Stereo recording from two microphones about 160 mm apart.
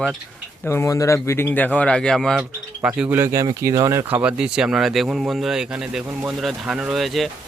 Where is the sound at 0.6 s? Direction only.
15° left (ahead or behind).